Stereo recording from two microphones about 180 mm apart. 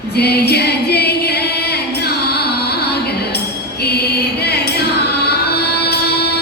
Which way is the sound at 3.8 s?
60° left (ahead or behind).